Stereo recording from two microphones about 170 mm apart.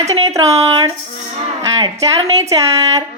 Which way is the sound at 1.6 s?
20° right (ahead or behind).